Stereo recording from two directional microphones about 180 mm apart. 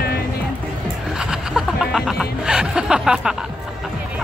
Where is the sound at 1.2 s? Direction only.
Centre (ahead or behind).